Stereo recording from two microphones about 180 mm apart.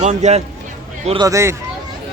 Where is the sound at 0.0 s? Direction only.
40° right (ahead or behind).